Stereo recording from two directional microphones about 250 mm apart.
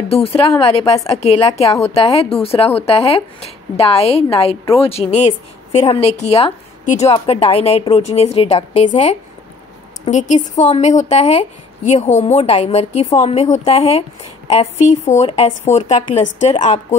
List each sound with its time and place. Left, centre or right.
0.1 s a woman's voice: left